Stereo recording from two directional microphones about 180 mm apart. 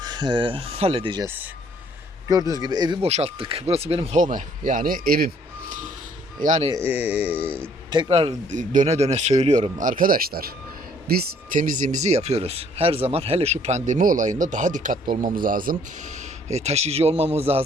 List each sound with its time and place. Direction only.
0.0 s speech: 25° right (ahead or behind)
2.3 s speech: 20° right (ahead or behind)
3.1 s speech: 35° right (ahead or behind); by 5.7 s 55° right (ahead or behind)
6.4 s speech: 40° right (ahead or behind)
6.7 s speech: 10° right (ahead or behind)
7.9 s speech: 25° right (ahead or behind)
8.5 s speech: 45° right (ahead or behind)
16.5 s speech: 40° right (ahead or behind)